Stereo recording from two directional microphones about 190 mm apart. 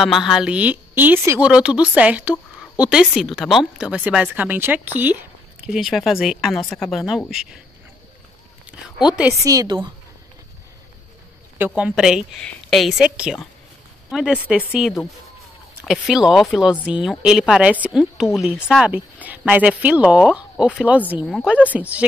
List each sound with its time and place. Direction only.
0.0 s a woman's voice: centre (ahead or behind)
9.4 s speech: 15° right (ahead or behind)
11.5 s a woman's voice: 10° right (ahead or behind)